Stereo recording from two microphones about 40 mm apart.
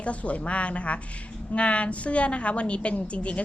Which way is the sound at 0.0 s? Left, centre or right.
Left.